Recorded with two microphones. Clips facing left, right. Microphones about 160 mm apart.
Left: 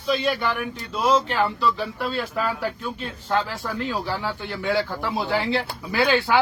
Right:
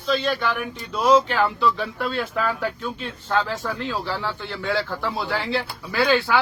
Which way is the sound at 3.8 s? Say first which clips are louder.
Even; 15° left (ahead or behind).